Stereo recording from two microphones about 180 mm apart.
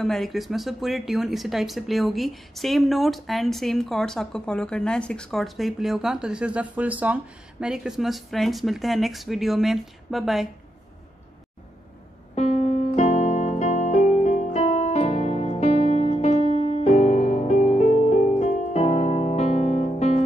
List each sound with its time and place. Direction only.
0.0 s speech: centre (ahead or behind)
12.4 s music: 40° left (ahead or behind)